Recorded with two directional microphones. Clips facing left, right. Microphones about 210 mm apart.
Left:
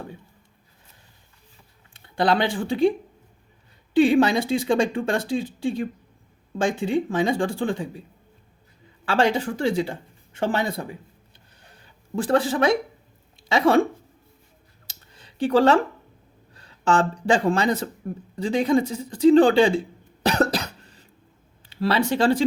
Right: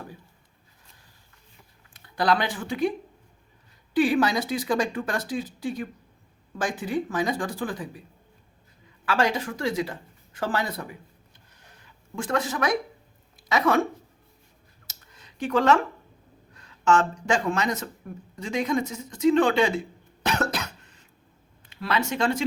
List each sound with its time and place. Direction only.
1.9 s speech: 30° left (ahead or behind)
3.9 s speech: 25° left (ahead or behind)
9.0 s speech: 30° left (ahead or behind)
14.8 s a sound: 30° left (ahead or behind)
16.5 s speech: 30° left (ahead or behind)
20.2 s cough: 35° left (ahead or behind)
21.6 s speech: 30° left (ahead or behind)